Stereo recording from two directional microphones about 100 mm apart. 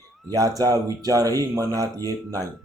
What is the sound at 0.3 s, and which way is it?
Speech, 35° right (ahead or behind).